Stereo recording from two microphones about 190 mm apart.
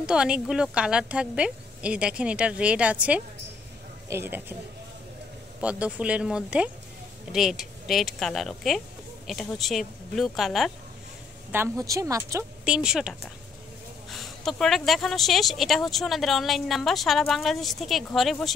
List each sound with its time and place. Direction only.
0.0 s a woman's voice: 5° right (ahead or behind)
5.6 s a woman's voice: 5° right (ahead or behind)
11.5 s a woman's voice: 15° right (ahead or behind); by 18.5 s centre (ahead or behind)